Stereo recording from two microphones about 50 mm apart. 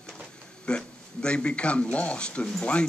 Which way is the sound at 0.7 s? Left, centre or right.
Centre.